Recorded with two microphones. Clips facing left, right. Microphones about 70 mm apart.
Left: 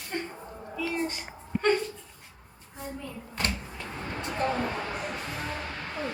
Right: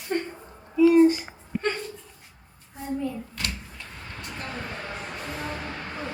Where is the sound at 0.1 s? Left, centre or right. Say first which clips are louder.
Right 6 dB; right.